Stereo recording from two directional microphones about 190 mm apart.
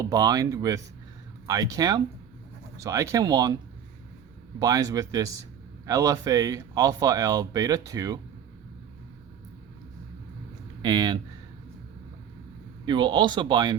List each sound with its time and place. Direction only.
0.0 s speech: 20° right (ahead or behind)
4.6 s speech: 20° right (ahead or behind)
10.8 s speech: 25° right (ahead or behind)
12.8 s speech: 25° right (ahead or behind)